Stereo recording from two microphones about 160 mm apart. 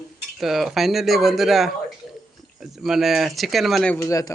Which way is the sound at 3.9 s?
20° left (ahead or behind).